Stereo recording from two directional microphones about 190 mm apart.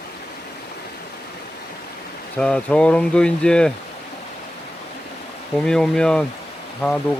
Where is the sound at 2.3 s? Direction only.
5° left (ahead or behind).